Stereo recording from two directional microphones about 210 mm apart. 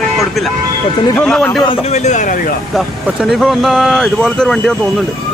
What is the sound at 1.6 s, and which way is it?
Speech, 25° left (ahead or behind).